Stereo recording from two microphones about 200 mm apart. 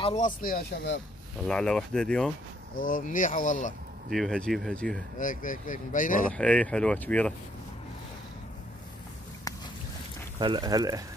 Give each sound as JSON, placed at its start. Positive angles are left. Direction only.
{"t": 0.0, "sound": "speech", "side_deg": 35}
{"t": 1.5, "sound": "speech", "side_deg": 5}
{"t": 2.7, "sound": "speech", "side_deg": 45}
{"t": 4.1, "sound": "speech", "side_deg": 5}
{"t": 5.2, "sound": "speech", "side_deg": 45}
{"t": 6.2, "sound": "speech", "side_deg": 5}
{"t": 9.5, "sound": "a sound", "side_deg": 20}
{"t": 10.4, "sound": "speech", "side_deg": -20}